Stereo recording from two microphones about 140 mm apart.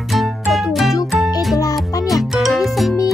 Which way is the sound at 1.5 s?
25° left (ahead or behind).